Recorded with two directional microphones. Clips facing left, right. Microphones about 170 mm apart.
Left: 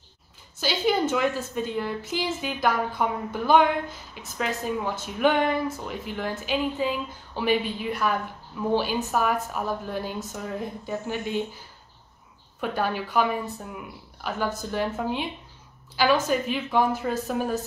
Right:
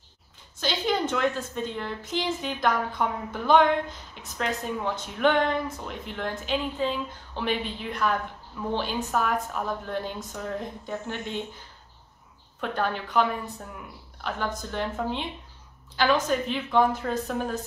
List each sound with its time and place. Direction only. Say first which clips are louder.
0.6 s a woman's voice: left 3 dB; 5° left (ahead or behind)
12.5 s a woman's voice: left 1 dB; 5° left (ahead or behind)